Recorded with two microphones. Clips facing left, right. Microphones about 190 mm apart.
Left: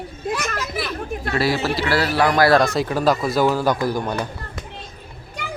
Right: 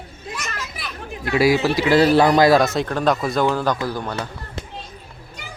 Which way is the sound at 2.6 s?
Centre (ahead or behind).